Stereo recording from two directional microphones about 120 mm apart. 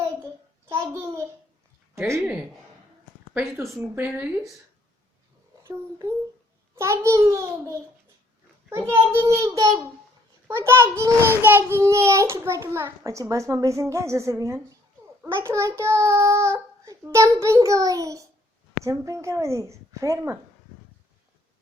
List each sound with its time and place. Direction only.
0.7 s a child's voice: 20° right (ahead or behind)
3.3 s a woman's voice: 25° right (ahead or behind)
6.7 s a child's voice: 25° right (ahead or behind)